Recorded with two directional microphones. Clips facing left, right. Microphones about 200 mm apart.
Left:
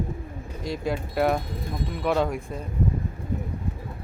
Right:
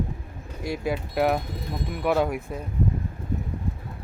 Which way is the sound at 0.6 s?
5° right (ahead or behind).